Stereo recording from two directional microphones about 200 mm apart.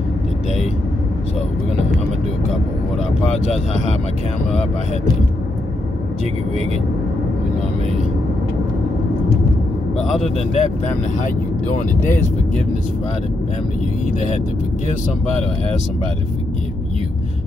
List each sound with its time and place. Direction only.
10.2 s speech: 30° left (ahead or behind)